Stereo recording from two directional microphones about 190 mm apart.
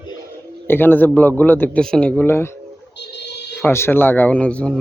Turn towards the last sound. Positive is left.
turn(degrees=5)  # may be behind; listen again after turning